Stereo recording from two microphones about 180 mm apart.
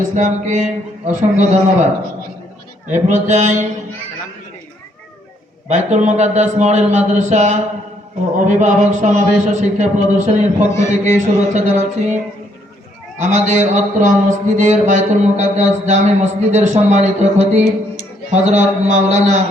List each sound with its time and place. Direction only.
0.2 s a man's voice: 40° right (ahead or behind)
2.9 s a man's voice: 40° right (ahead or behind)
5.6 s a man's voice: 40° right (ahead or behind)